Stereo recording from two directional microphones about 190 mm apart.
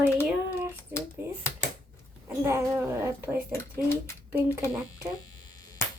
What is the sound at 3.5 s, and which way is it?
Speech, 15° left (ahead or behind).